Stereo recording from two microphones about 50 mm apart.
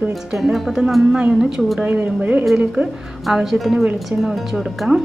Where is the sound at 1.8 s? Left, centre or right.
Right.